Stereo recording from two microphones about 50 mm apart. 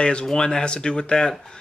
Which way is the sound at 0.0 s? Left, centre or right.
Centre.